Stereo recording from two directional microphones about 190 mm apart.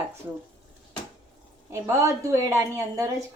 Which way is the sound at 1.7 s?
15° right (ahead or behind).